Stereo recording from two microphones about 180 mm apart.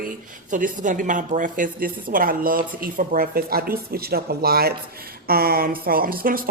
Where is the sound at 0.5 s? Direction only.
45° right (ahead or behind).